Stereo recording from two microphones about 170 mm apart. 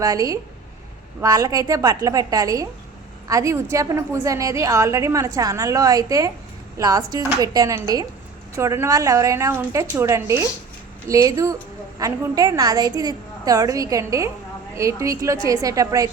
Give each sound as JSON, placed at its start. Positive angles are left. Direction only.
{"t": 0.0, "sound": "a woman's voice", "side_deg": -20}